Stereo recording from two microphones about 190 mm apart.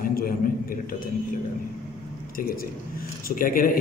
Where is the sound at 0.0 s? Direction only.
50° left (ahead or behind).